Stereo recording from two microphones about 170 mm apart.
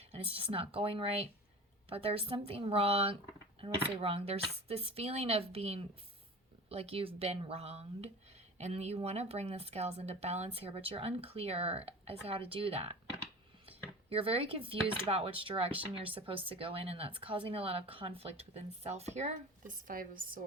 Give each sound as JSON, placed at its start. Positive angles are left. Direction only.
{"t": 0.1, "sound": "speech", "side_deg": -35}
{"t": 14.1, "sound": "speech", "side_deg": -35}
{"t": 19.9, "sound": "a woman's voice", "side_deg": -55}